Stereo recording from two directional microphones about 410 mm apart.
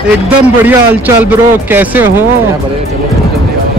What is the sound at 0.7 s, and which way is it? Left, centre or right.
A man's voice, centre.